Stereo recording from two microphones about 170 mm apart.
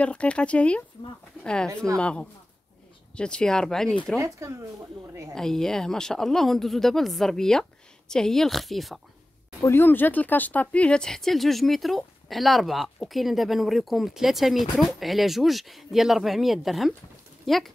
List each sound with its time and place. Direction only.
0.0 s speech: 5° left (ahead or behind)
4.2 s speech: 15° right (ahead or behind)
5.3 s speech: 5° left (ahead or behind)
9.6 s speech: 15° left (ahead or behind)